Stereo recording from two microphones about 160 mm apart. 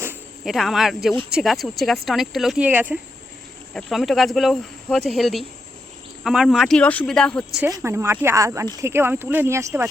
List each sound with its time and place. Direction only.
0.4 s speech: centre (ahead or behind)
7.8 s speech: 15° right (ahead or behind)